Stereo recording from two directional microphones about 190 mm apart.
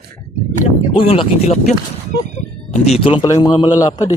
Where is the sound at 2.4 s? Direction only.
35° left (ahead or behind).